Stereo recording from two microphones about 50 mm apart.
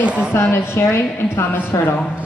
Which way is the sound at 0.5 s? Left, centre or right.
Left.